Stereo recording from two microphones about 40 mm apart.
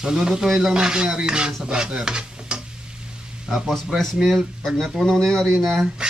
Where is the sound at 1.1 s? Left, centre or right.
Right.